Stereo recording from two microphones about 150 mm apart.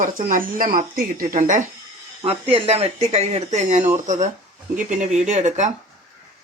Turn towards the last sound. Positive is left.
turn(degrees=-50)  # may be behind; listen again after turning